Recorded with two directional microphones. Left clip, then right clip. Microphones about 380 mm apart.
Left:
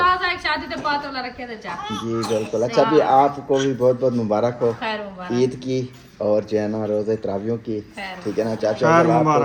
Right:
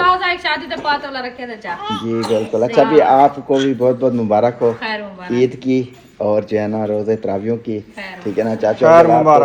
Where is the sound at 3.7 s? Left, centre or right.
Right.